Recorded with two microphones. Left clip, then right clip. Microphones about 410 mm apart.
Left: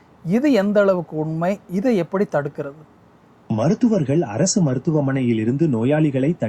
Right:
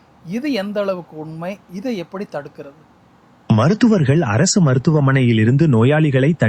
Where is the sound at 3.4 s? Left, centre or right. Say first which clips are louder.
Right 4 dB; right.